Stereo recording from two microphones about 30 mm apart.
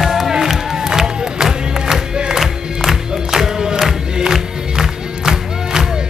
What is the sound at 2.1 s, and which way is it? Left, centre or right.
Music, right.